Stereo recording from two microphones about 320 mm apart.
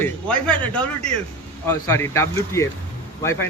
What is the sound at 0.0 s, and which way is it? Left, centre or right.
A man's voice, centre.